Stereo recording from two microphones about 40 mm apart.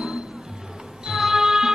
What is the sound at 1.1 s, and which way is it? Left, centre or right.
Music, centre.